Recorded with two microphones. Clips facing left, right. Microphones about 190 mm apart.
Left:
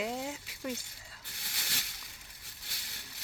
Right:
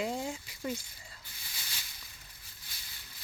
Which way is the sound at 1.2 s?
70° left (ahead or behind).